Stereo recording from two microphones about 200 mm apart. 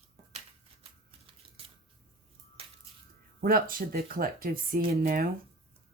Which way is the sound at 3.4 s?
45° right (ahead or behind).